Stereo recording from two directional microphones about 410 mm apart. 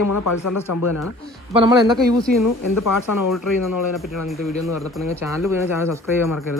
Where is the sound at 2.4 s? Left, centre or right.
Left.